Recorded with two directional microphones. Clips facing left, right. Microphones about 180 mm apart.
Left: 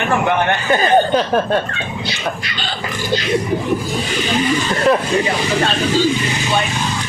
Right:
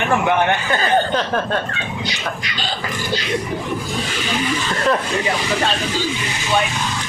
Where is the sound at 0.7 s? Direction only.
15° left (ahead or behind).